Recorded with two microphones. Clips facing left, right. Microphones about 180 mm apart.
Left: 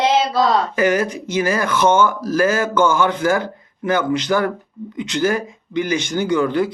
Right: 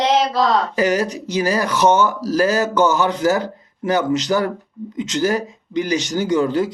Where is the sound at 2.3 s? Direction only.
35° right (ahead or behind).